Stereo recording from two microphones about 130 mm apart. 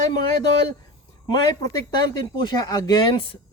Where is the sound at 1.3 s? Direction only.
35° left (ahead or behind).